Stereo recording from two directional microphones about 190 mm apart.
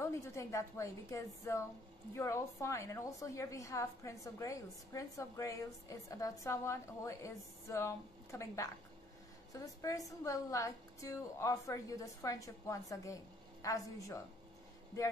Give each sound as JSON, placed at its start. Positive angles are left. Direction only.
{"t": 0.0, "sound": "a woman's voice", "side_deg": 15}